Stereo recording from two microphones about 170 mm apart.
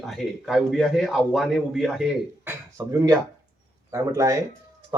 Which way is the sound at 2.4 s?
20° right (ahead or behind).